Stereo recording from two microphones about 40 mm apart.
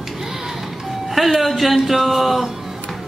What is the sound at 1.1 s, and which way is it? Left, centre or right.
Speech, centre.